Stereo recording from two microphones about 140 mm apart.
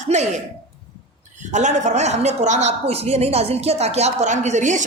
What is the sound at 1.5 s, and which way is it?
A woman's voice, 55° right (ahead or behind).